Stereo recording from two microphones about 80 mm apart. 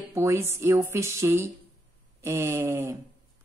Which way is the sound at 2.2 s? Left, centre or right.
Right.